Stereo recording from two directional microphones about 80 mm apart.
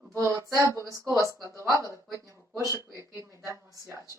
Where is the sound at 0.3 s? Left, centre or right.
Right.